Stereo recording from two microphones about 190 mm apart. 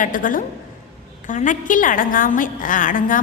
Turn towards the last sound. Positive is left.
turn(degrees=45)  # may be behind; listen again after turning